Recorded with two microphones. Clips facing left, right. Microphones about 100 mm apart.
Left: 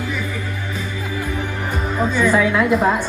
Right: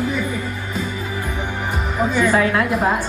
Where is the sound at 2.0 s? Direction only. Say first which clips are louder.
Even; 10° right (ahead or behind).